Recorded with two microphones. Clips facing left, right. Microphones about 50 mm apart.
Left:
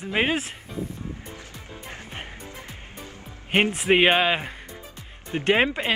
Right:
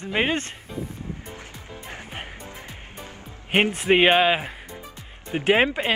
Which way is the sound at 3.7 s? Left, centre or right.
Centre.